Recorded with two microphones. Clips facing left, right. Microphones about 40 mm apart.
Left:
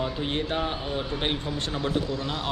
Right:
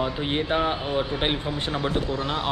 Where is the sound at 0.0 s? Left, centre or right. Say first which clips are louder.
Right 3 dB; centre.